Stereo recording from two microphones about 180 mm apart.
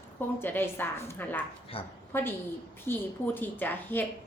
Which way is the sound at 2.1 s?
10° left (ahead or behind).